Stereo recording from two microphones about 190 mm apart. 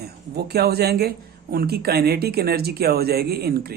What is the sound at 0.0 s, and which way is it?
Speech, 55° right (ahead or behind).